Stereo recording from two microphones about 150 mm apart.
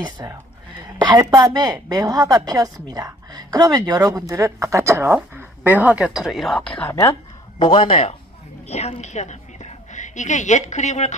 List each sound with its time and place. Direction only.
0.2 s a woman's voice: 25° right (ahead or behind); by 7.0 s 10° left (ahead or behind)
7.5 s a woman's voice: 35° left (ahead or behind); by 11.1 s 50° left (ahead or behind)